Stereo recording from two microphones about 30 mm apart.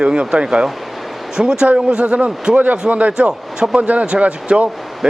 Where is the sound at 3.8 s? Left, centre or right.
Right.